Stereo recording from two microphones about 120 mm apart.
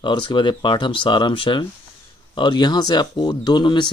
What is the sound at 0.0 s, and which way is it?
Speech, 40° left (ahead or behind).